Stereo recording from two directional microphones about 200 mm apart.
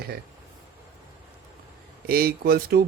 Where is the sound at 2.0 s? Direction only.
50° right (ahead or behind).